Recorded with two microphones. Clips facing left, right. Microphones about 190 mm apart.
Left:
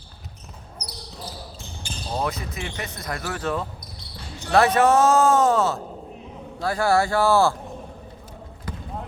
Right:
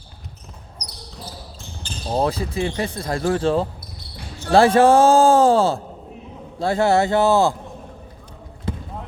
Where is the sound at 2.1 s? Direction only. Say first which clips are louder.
Right 7 dB; 30° right (ahead or behind).